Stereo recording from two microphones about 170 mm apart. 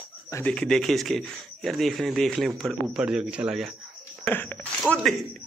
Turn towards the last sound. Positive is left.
turn(degrees=0)  # may be behind; listen again after turning